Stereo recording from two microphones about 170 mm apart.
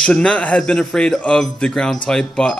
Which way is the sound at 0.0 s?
5° left (ahead or behind).